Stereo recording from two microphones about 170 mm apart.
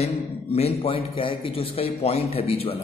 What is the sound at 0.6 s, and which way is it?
A man's voice, 35° left (ahead or behind).